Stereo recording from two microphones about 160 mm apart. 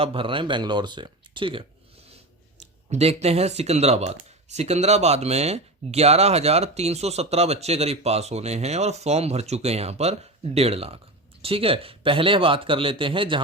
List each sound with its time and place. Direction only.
0.0 s speech: 35° right (ahead or behind)
2.6 s speech: 40° right (ahead or behind)